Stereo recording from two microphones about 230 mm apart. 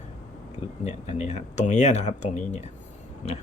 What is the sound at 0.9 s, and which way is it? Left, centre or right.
Speech, left.